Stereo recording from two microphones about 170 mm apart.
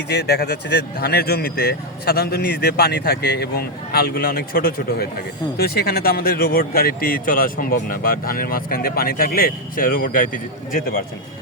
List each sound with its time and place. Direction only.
0.1 s speech: 70° left (ahead or behind); by 11.0 s 55° left (ahead or behind)